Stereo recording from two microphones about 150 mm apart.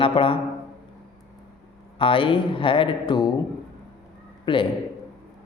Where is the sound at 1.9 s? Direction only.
35° left (ahead or behind).